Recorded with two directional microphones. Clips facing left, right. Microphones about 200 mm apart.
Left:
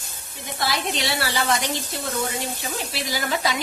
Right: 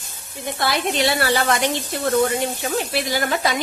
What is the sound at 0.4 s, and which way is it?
A woman's voice, 55° right (ahead or behind).